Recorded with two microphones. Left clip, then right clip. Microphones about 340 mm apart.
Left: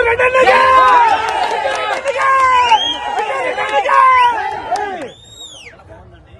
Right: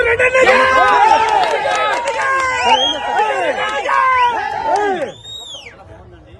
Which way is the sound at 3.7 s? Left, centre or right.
Left.